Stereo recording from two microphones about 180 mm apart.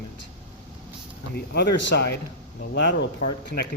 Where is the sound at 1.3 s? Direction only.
65° left (ahead or behind).